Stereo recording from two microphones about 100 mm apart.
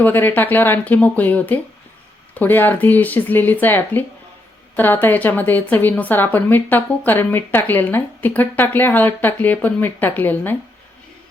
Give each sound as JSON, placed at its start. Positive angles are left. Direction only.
{"t": 0.0, "sound": "a woman's voice", "side_deg": 20}